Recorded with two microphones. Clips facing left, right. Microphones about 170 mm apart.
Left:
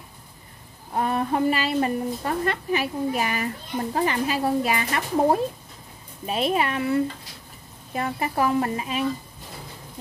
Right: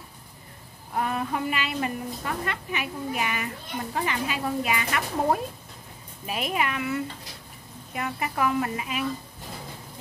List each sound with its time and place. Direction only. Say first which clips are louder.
0.9 s a woman's voice: left 4 dB; 35° left (ahead or behind)